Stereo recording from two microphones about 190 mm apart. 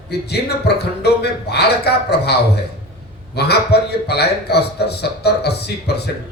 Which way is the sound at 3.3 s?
60° left (ahead or behind).